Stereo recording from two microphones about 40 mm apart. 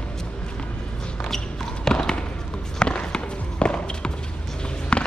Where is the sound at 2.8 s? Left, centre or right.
Left.